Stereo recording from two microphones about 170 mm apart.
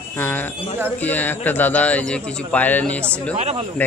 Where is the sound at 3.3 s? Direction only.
40° right (ahead or behind).